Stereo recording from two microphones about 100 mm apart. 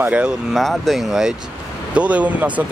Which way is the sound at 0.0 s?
15° right (ahead or behind).